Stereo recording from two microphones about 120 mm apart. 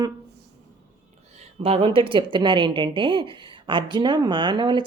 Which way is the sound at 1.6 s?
50° right (ahead or behind).